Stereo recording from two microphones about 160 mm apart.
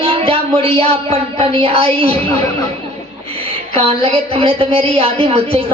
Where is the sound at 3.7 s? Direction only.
35° right (ahead or behind).